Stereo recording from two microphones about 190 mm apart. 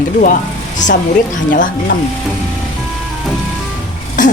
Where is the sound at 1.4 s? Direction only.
45° left (ahead or behind).